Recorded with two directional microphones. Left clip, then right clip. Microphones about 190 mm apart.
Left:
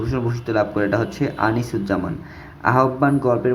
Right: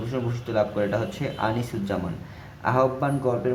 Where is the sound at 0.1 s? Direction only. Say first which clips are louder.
Left 3 dB; 15° left (ahead or behind).